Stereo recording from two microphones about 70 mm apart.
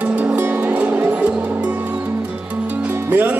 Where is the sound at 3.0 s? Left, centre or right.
Right.